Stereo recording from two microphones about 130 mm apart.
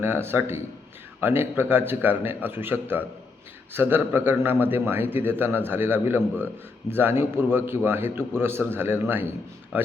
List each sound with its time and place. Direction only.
0.0 s a man's voice: 15° right (ahead or behind)